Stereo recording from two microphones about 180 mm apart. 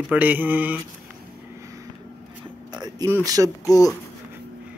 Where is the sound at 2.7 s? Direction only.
20° right (ahead or behind).